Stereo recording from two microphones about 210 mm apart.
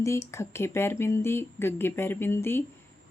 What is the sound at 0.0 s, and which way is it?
A woman's voice, 15° left (ahead or behind).